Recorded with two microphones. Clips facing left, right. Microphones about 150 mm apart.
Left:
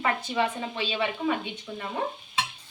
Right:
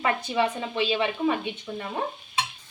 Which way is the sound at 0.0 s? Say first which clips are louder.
Right 2 dB; 20° right (ahead or behind).